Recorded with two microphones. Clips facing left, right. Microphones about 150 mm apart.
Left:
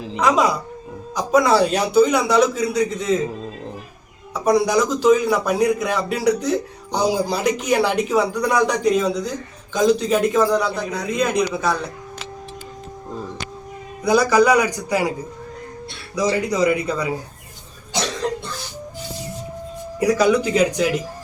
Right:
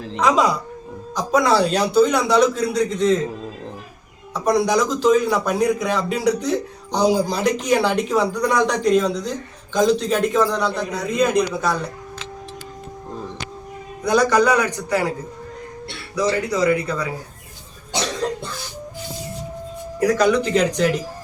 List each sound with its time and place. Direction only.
0.0 s a man's voice: 5° left (ahead or behind)
14.0 s a man's voice: 5° left (ahead or behind)
16.1 s a man's voice: 15° left (ahead or behind)
20.0 s a man's voice: 10° left (ahead or behind)